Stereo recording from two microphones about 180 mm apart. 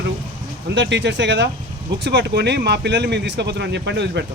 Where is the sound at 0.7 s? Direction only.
75° right (ahead or behind).